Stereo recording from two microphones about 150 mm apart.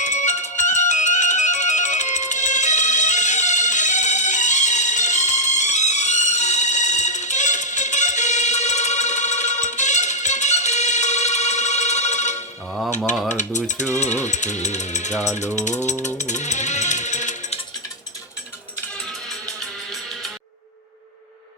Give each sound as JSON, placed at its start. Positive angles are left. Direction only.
{"t": 0.0, "sound": "music", "side_deg": 50}
{"t": 13.2, "sound": "rattle", "side_deg": 55}
{"t": 14.0, "sound": "music", "side_deg": 50}
{"t": 19.5, "sound": "music", "side_deg": 0}